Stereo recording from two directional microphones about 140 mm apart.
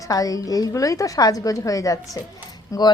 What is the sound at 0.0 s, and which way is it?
A woman's voice, 25° left (ahead or behind).